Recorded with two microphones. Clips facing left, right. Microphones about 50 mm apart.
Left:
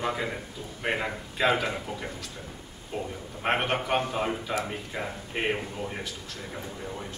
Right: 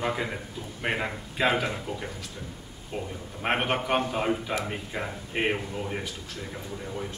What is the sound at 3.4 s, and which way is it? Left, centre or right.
A man's voice, centre.